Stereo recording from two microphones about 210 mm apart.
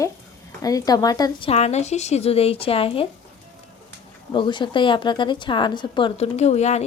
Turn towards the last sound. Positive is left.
turn(degrees=30)  # may be behind; listen again after turning